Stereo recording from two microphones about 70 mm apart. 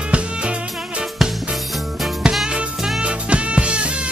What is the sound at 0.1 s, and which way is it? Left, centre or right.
Music, centre.